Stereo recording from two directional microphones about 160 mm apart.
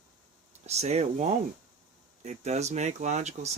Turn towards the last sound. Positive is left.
turn(degrees=-45)  # may be behind; listen again after turning